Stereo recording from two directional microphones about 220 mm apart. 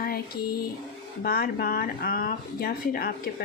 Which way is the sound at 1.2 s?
40° left (ahead or behind).